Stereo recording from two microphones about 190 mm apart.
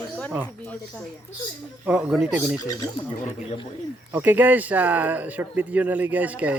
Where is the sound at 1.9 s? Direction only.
5° right (ahead or behind).